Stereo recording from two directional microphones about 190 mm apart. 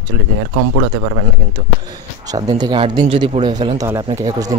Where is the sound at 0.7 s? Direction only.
65° right (ahead or behind).